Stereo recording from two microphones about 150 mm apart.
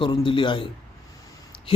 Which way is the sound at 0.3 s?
35° left (ahead or behind).